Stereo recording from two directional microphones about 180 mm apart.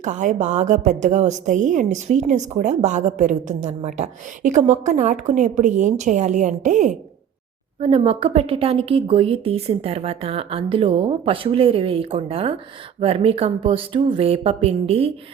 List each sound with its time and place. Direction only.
0.0 s a woman's voice: 45° right (ahead or behind)